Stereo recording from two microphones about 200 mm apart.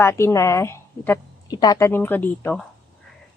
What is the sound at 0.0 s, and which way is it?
Speech, 15° left (ahead or behind).